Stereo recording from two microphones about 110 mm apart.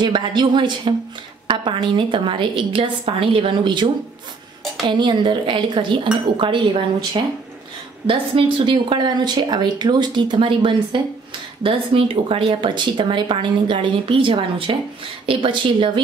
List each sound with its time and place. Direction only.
0.0 s speech: 45° right (ahead or behind)
8.1 s speech: 50° right (ahead or behind)